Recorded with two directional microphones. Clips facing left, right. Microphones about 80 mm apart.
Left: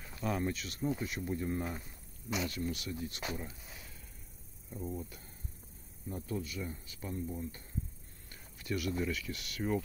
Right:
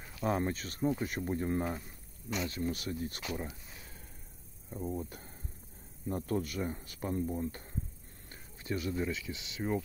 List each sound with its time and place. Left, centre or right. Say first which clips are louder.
0.2 s speech: right 3 dB; right
2.7 s speech: right 3 dB; right
3.7 s a sound: even; right
4.6 s speech: right 3 dB; right
4.9 s speech: right 4 dB; right
6.0 s speech: right 5 dB; right
8.3 s speech: right 1 dB; right